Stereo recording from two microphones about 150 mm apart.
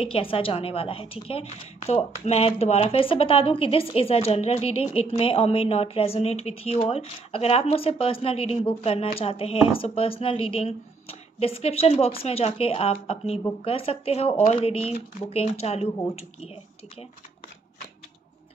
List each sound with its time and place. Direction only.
0.0 s a woman's voice: 35° left (ahead or behind)